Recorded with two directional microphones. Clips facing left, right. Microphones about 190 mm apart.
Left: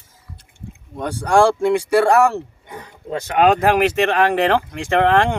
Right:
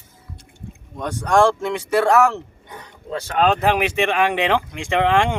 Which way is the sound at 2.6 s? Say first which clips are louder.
Left 4 dB; 25° left (ahead or behind).